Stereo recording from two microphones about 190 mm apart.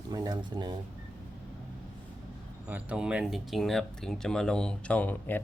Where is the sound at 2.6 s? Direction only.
5° right (ahead or behind).